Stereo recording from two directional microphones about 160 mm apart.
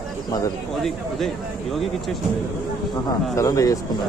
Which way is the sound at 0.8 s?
Centre (ahead or behind).